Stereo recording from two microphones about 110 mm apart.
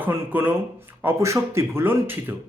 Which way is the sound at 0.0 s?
15° right (ahead or behind).